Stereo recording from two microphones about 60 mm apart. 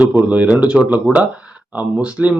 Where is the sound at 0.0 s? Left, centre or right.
Right.